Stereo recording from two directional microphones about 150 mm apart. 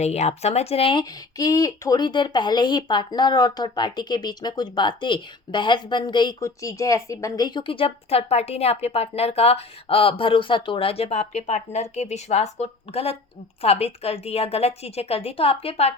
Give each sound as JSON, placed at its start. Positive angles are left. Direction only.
{"t": 0.0, "sound": "a woman's voice", "side_deg": 45}
{"t": 1.4, "sound": "a woman's voice", "side_deg": 25}